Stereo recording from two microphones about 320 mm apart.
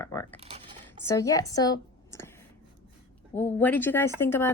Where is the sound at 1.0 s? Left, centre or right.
Centre.